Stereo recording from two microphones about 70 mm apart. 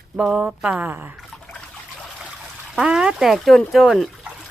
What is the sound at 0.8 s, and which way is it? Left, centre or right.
Speech, right.